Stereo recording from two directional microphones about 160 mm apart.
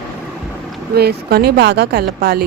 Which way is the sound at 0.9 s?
85° right.